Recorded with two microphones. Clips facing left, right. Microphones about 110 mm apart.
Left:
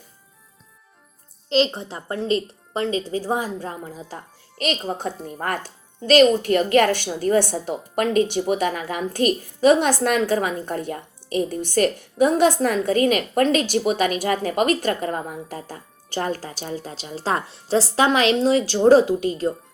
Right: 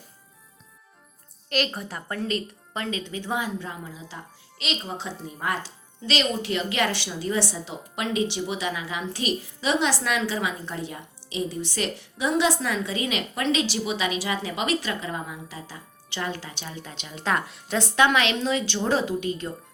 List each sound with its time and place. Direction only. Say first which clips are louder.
1.5 s speech: left 7 dB; 25° left (ahead or behind)